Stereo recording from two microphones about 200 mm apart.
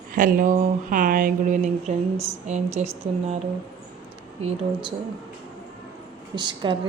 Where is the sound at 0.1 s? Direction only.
45° right (ahead or behind).